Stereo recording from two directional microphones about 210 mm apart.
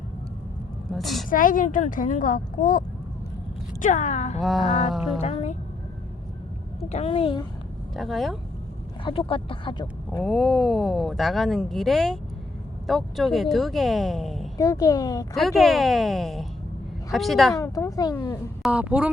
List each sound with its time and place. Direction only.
0.9 s speech: centre (ahead or behind)
1.3 s speech: 40° left (ahead or behind)
4.4 s speech: centre (ahead or behind)
5.2 s speech: 30° left (ahead or behind)
6.8 s speech: 30° left (ahead or behind)
7.9 s speech: centre (ahead or behind)
9.0 s speech: 25° left (ahead or behind)
10.2 s speech: centre (ahead or behind)
14.6 s speech: 15° left (ahead or behind)
15.4 s speech: centre (ahead or behind)
17.5 s speech: 15° left (ahead or behind)
18.6 s a woman's voice: 5° right (ahead or behind)